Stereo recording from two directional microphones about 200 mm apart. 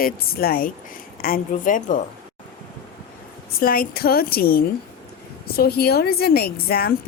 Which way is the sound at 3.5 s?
45° left (ahead or behind).